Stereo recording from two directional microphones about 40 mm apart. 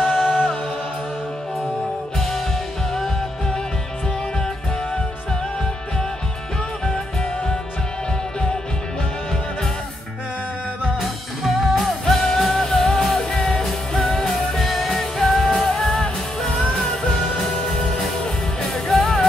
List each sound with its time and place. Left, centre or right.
0.0 s music: centre
11.0 s music: centre